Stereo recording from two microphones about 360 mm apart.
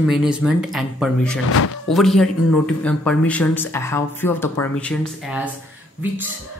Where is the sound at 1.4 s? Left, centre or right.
Left.